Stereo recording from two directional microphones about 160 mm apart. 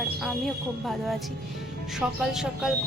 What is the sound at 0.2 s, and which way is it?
A woman's voice, centre (ahead or behind).